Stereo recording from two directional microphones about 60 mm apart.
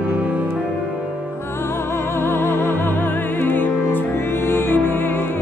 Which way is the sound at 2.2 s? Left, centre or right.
Left.